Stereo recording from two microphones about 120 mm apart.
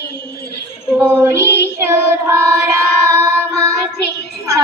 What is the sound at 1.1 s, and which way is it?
Child singing, 15° right (ahead or behind).